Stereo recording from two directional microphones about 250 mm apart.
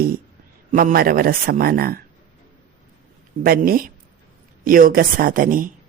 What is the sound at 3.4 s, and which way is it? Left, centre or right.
Speech, right.